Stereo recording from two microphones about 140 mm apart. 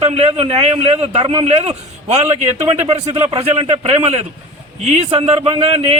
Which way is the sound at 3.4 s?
45° right (ahead or behind).